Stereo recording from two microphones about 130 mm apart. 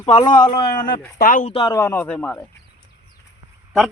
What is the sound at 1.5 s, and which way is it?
Speech, 40° left (ahead or behind).